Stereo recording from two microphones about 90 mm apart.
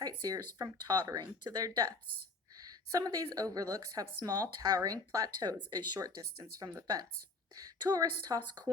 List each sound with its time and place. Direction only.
0.0 s a woman's voice: 45° right (ahead or behind)